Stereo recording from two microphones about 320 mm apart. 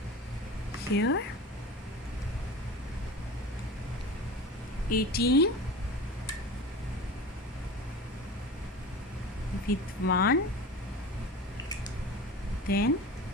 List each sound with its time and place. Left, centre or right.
0.9 s speech: left
4.9 s speech: left
9.6 s speech: left
12.6 s speech: left